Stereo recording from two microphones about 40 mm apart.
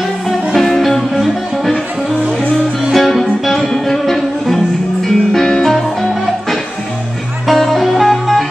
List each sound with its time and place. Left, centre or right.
0.6 s music: centre